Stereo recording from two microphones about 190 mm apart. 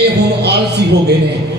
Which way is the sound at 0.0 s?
60° right (ahead or behind).